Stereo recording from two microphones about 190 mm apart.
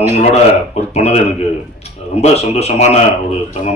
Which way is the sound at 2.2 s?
35° left (ahead or behind).